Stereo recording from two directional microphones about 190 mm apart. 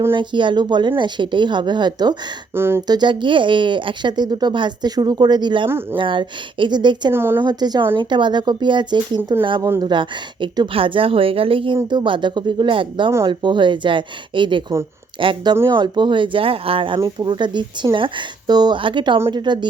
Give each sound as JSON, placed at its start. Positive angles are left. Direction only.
{"t": 0.1, "sound": "speech", "side_deg": -25}
{"t": 5.6, "sound": "speech", "side_deg": -10}
{"t": 6.0, "sound": "speech", "side_deg": -25}
{"t": 7.1, "sound": "speech", "side_deg": -10}
{"t": 7.4, "sound": "speech", "side_deg": -20}